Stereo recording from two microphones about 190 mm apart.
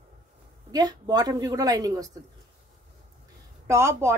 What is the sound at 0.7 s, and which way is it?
Speech, 20° right (ahead or behind).